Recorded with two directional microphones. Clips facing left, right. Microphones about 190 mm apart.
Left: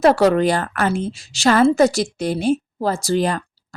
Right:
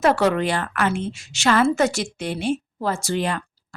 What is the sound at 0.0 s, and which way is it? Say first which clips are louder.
A woman's voice: left 5 dB; 35° left (ahead or behind).